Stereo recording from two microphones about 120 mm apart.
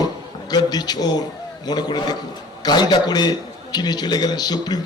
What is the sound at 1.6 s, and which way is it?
A man's voice, 40° left (ahead or behind).